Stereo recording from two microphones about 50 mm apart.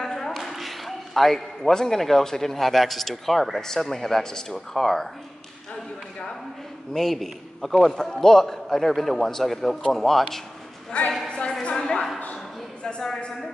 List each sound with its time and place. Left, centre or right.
0.0 s a sound: centre
0.4 s a man's voice: centre
6.9 s a man's voice: centre
7.9 s a man's voice: centre
10.9 s a woman's voice: left
11.2 s a sound: centre
12.8 s a man's voice: centre